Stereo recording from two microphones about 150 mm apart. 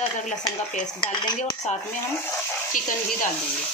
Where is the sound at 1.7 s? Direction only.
50° left (ahead or behind).